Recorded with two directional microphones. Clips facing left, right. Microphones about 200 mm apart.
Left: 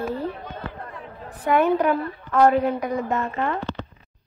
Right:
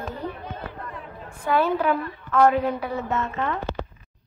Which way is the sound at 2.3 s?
35° left (ahead or behind).